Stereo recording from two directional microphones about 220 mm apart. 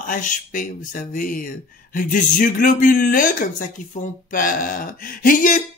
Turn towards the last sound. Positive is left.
turn(degrees=35)  # may be behind; listen again after turning